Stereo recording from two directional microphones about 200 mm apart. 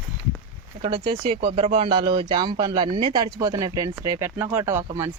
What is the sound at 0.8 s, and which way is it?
Speech, 25° right (ahead or behind).